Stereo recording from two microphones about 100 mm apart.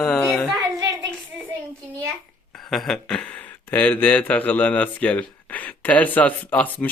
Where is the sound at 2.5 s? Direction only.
Centre (ahead or behind).